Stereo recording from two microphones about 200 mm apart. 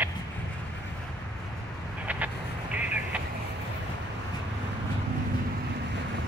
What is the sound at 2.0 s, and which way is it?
Vehicle, 5° right (ahead or behind).